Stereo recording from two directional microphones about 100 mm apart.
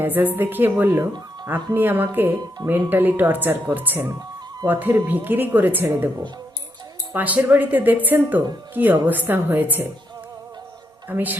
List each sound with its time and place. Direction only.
0.0 s a woman's voice: 20° right (ahead or behind)
7.1 s a woman's voice: 15° right (ahead or behind)
11.1 s speech: 15° right (ahead or behind)